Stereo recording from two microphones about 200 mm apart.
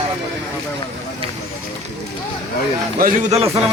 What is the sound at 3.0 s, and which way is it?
Speech, 35° right (ahead or behind).